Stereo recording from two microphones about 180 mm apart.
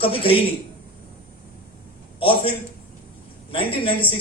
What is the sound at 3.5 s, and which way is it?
Speech, 30° left (ahead or behind).